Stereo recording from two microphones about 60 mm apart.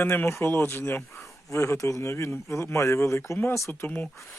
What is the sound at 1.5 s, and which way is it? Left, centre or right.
Speech, left.